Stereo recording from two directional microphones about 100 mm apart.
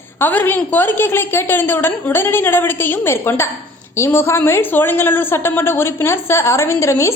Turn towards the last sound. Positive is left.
turn(degrees=30)  # may be behind; listen again after turning